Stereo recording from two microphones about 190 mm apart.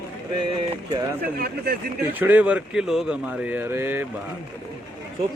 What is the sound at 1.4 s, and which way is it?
Speech, 55° right (ahead or behind).